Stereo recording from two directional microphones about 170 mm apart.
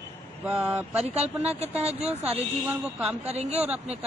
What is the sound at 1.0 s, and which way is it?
Speech, 40° right (ahead or behind).